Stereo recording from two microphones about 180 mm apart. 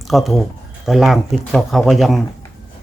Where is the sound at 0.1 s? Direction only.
Centre (ahead or behind).